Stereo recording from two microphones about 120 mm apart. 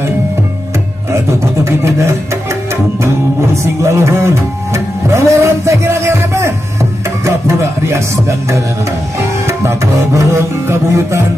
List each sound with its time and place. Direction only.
1.1 s music: 25° right (ahead or behind)